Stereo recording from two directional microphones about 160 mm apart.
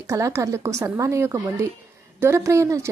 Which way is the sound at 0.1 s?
20° right (ahead or behind).